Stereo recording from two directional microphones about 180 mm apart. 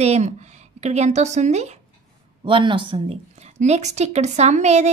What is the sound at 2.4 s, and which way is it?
A woman's voice, 25° right (ahead or behind).